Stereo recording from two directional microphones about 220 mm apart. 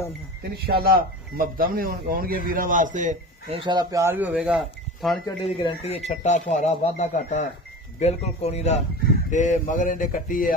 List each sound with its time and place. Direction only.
0.4 s a man's voice: 45° right (ahead or behind)
3.6 s speech: 15° right (ahead or behind); by 5.2 s centre (ahead or behind)
5.4 s speech: 25° left (ahead or behind)